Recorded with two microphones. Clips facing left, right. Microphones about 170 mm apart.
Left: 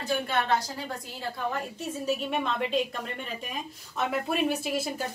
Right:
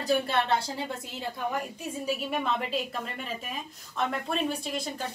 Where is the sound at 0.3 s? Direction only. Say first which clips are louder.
Even; 30° right (ahead or behind).